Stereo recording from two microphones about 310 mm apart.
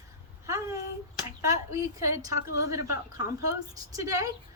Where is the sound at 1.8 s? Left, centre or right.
Centre.